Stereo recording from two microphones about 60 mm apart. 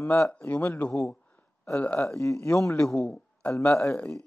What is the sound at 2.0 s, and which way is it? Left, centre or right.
Speech, left.